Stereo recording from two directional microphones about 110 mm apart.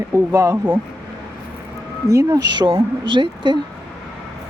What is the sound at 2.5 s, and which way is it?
A woman's voice, 45° right (ahead or behind).